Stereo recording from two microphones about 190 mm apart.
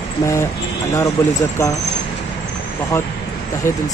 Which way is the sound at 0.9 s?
15° left (ahead or behind).